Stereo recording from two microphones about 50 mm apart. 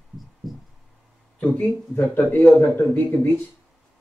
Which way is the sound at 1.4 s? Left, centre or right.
Left.